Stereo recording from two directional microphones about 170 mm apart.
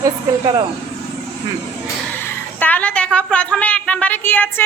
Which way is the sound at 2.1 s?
10° left (ahead or behind).